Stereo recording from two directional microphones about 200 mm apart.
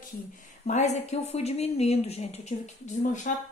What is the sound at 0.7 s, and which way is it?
A woman's voice, 35° left (ahead or behind).